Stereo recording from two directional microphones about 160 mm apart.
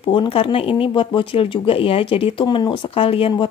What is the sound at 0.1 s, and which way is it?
Speech, 30° left (ahead or behind).